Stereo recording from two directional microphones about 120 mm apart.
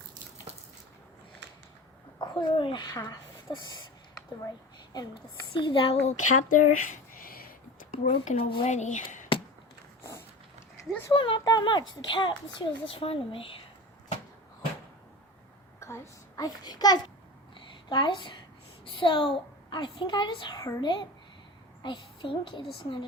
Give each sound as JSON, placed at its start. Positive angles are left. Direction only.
{"t": 0.5, "sound": "a sound", "side_deg": -60}
{"t": 2.1, "sound": "speech", "side_deg": 40}
{"t": 4.9, "sound": "speech", "side_deg": 45}
{"t": 6.1, "sound": "speech", "side_deg": 90}
{"t": 8.0, "sound": "speech", "side_deg": 60}
{"t": 8.6, "sound": "speech", "side_deg": 85}
{"t": 10.0, "sound": "a sound", "side_deg": 20}
{"t": 11.1, "sound": "a child's voice", "side_deg": 40}
{"t": 15.8, "sound": "a child's voice", "side_deg": 25}